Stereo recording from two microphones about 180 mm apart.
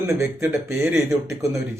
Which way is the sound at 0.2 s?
5° right (ahead or behind).